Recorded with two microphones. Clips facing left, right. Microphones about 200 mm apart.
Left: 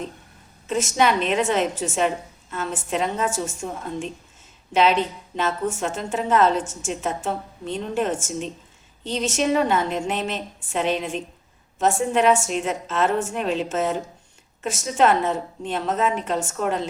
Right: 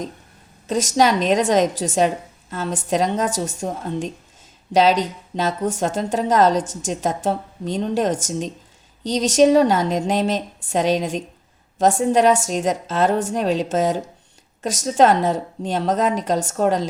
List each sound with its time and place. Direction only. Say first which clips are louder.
0.7 s a woman's voice: right 3 dB; 35° right (ahead or behind)